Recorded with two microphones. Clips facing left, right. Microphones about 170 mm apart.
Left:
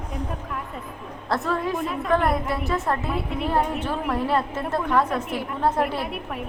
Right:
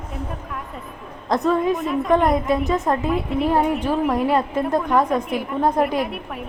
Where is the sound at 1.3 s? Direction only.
20° right (ahead or behind).